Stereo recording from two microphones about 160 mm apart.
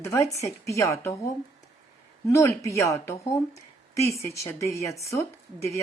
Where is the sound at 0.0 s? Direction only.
20° left (ahead or behind).